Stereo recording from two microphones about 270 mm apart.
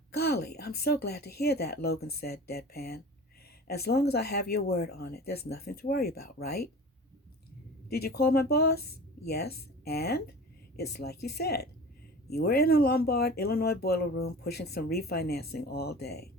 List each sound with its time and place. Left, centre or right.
0.2 s speech: left
8.0 s speech: left